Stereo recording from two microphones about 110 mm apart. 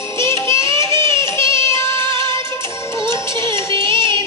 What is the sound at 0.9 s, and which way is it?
Music, 45° right (ahead or behind).